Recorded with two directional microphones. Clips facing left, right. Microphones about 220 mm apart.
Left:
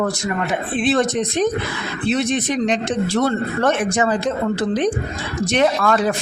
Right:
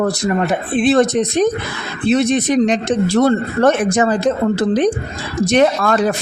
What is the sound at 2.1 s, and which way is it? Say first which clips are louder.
Speech: right 6 dB; 40° right (ahead or behind).